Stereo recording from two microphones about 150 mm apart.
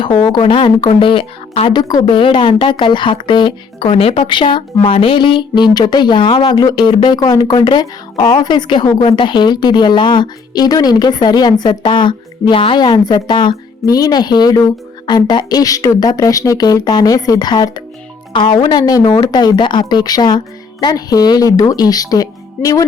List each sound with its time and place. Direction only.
0.0 s speech: 30° left (ahead or behind)